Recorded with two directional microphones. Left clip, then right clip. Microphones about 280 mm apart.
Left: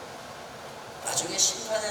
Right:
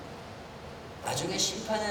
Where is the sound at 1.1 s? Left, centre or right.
Centre.